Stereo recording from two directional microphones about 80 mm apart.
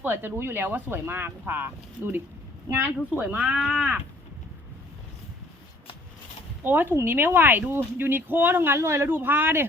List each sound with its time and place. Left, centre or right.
0.0 s speech: right
3.2 s speech: centre
6.6 s speech: right
9.0 s speech: right